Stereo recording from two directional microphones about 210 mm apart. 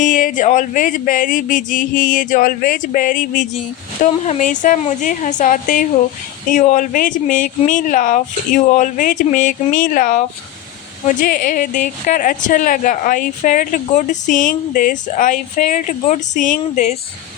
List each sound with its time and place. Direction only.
0.0 s a woman's voice: 40° left (ahead or behind)